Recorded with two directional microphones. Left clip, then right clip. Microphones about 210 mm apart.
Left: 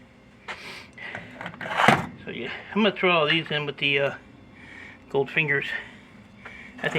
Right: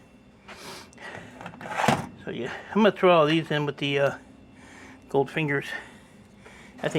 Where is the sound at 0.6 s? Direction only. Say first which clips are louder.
Left 3 dB; 45° right (ahead or behind).